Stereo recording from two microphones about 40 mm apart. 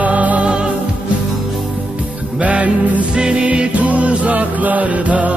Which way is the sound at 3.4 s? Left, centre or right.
Right.